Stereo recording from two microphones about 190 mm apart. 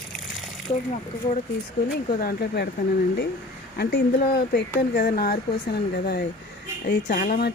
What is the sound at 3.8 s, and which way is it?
Speech, 50° left (ahead or behind).